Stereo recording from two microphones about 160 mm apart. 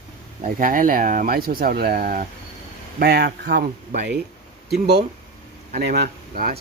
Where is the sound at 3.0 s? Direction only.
85° right.